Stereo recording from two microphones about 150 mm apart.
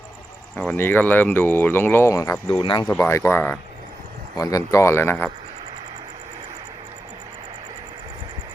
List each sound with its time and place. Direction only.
0.7 s speech: 15° left (ahead or behind); by 2.8 s 35° left (ahead or behind)
3.0 s speech: 20° left (ahead or behind)
4.4 s speech: 25° left (ahead or behind)